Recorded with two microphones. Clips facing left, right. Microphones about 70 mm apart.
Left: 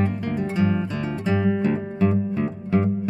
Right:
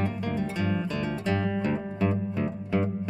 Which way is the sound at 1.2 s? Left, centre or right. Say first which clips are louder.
Left 8 dB; centre.